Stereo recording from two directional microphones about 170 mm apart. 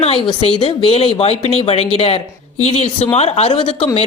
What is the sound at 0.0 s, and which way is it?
Speech, 30° left (ahead or behind).